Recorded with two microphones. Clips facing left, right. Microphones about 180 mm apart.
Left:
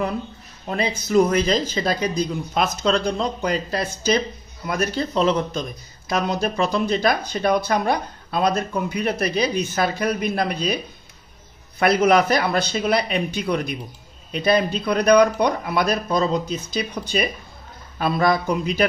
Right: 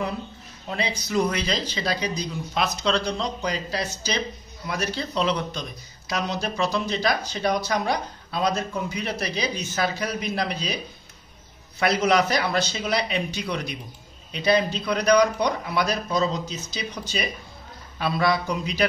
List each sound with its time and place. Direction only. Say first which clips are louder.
0.7 s speech: left 5 dB; 50° left (ahead or behind)
11.8 s speech: left 4 dB; 55° left (ahead or behind)